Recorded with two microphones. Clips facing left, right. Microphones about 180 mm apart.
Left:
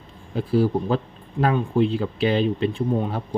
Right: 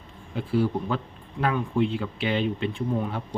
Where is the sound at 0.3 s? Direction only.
40° left (ahead or behind).